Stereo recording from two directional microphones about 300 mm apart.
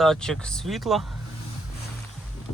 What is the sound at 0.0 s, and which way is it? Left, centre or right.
Speech, centre.